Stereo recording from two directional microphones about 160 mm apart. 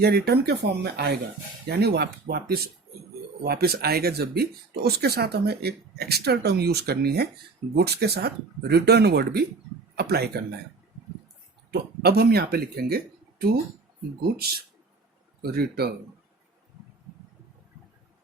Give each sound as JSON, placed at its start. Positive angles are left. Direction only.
{"t": 0.0, "sound": "speech", "side_deg": -85}
{"t": 11.7, "sound": "speech", "side_deg": -80}
{"t": 14.2, "sound": "speech", "side_deg": -75}